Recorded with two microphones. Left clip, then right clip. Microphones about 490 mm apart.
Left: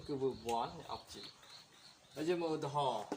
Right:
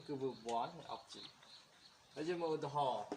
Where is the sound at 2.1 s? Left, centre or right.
Right.